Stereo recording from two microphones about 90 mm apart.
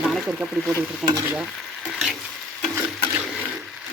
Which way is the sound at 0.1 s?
Centre (ahead or behind).